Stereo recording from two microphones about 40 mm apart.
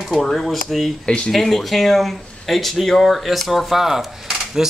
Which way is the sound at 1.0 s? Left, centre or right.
Left.